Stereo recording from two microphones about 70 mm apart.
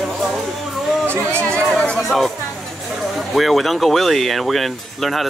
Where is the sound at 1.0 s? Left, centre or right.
Right.